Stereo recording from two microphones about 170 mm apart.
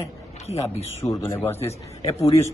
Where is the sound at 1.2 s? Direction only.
15° left (ahead or behind).